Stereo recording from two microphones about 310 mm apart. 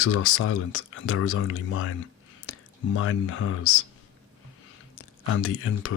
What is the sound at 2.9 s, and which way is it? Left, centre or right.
Speech, left.